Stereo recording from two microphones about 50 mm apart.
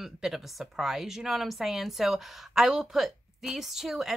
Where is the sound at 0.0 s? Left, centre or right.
Centre.